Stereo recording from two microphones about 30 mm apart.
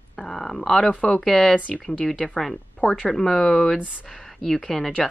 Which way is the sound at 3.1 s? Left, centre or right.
Centre.